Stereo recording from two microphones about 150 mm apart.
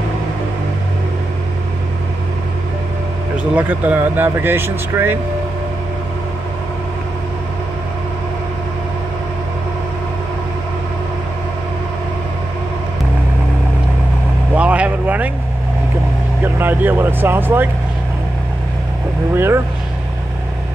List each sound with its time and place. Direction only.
3.5 s speech: 10° right (ahead or behind)
14.5 s vehicle: 10° right (ahead or behind)
16.4 s vehicle: 15° right (ahead or behind)
19.3 s speech: 15° right (ahead or behind)